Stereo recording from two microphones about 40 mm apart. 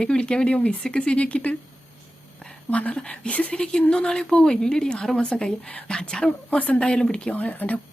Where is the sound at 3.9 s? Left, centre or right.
Left.